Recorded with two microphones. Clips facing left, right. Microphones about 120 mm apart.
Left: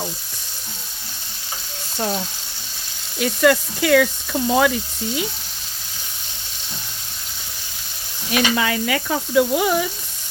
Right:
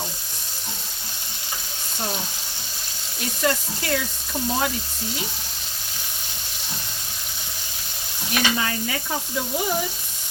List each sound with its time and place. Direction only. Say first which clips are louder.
3.2 s sizzle: left 8 dB; 90° left
8.3 s sizzle: left 5 dB; 90° left